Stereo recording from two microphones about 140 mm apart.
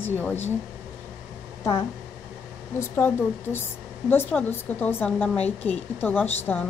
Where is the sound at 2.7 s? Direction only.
15° left (ahead or behind).